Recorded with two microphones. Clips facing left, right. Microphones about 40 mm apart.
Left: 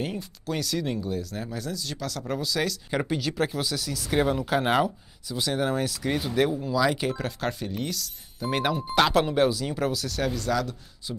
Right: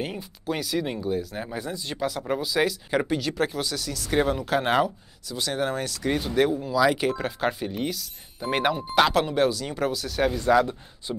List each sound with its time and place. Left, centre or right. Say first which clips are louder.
0.0 s speech: even; centre
2.9 s speech: right 2 dB; centre; by 11.1 s right